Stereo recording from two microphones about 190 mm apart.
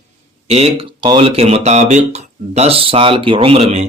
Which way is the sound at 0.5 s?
30° right (ahead or behind).